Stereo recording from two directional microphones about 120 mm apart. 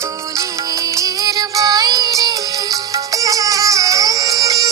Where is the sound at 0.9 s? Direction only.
30° right (ahead or behind).